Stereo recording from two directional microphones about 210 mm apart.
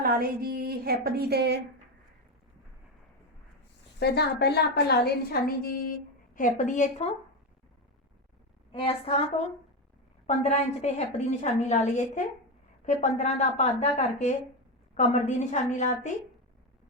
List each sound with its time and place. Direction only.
0.0 s a woman's voice: 45° right (ahead or behind)
4.0 s a woman's voice: 50° left (ahead or behind)
6.3 s a woman's voice: 35° left (ahead or behind)
8.7 s a woman's voice: 25° left (ahead or behind)
10.2 s a woman's voice: 30° left (ahead or behind)